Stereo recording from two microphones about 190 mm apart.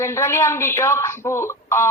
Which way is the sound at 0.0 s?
15° left (ahead or behind).